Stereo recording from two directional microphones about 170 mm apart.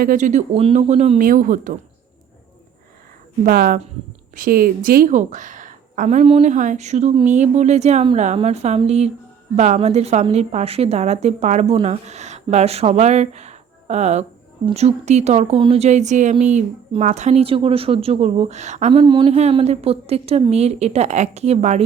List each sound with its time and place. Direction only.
0.0 s a woman's voice: 50° right (ahead or behind)
1.2 s a woman's voice: 55° right (ahead or behind)
3.4 s a woman's voice: 60° right (ahead or behind); by 21.8 s 40° right (ahead or behind)